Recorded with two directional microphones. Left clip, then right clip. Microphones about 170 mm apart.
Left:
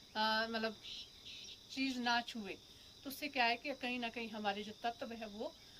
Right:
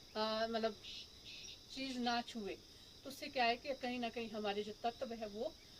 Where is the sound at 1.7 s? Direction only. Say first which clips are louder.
Left 3 dB; 15° right (ahead or behind).